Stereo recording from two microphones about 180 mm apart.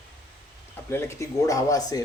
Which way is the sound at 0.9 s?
15° left (ahead or behind).